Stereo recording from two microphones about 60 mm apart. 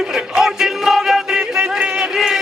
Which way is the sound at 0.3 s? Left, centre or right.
Centre.